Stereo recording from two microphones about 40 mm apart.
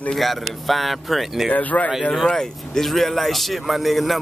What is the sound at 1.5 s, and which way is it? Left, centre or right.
Speech, left.